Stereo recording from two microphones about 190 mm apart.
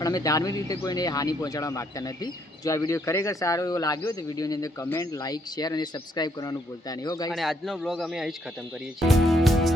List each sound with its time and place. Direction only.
0.0 s speech: 20° left (ahead or behind)
7.3 s a man's voice: centre (ahead or behind)